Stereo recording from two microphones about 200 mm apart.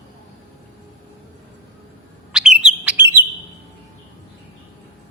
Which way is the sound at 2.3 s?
5° right (ahead or behind).